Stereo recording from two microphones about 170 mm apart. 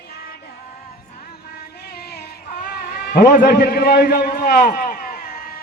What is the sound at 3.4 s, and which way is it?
A man's voice, 70° left (ahead or behind).